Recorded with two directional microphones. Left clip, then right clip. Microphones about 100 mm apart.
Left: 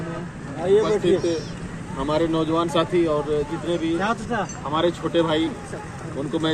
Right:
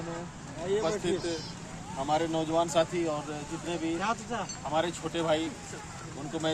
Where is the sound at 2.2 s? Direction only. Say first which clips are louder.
Left 9 dB; 50° right (ahead or behind).